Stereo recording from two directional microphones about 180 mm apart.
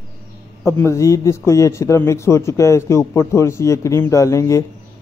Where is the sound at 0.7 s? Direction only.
15° left (ahead or behind).